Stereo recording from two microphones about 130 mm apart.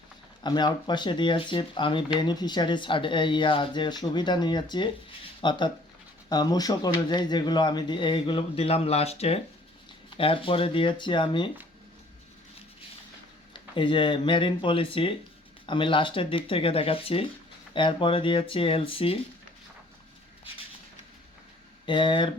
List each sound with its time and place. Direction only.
0.4 s speech: 35° left (ahead or behind)
13.5 s speech: 40° left (ahead or behind)
21.8 s speech: 40° left (ahead or behind)